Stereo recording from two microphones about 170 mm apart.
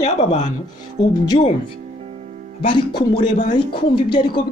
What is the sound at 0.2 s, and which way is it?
Speech, 40° left (ahead or behind).